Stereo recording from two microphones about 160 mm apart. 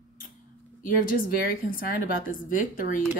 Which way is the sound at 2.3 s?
60° left (ahead or behind).